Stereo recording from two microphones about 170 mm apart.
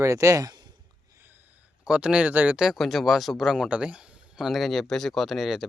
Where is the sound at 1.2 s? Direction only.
10° right (ahead or behind).